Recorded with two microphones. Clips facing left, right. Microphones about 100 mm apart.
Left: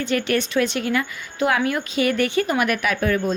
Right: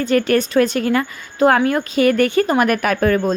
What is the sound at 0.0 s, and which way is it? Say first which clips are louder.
A woman's voice: right 6 dB; 40° right (ahead or behind).